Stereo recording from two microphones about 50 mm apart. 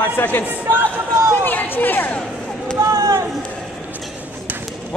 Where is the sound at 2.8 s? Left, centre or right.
Right.